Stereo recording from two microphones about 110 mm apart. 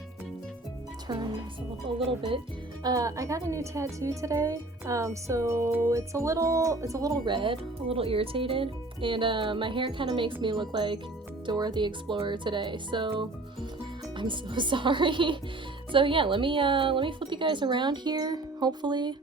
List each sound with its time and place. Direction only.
2.0 s speech: 55° right (ahead or behind)
2.8 s a woman's voice: 30° right (ahead or behind)